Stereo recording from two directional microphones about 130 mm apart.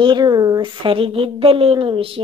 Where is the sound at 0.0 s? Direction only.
30° right (ahead or behind).